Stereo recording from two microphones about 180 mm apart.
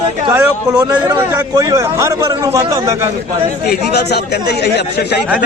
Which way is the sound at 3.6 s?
60° left (ahead or behind).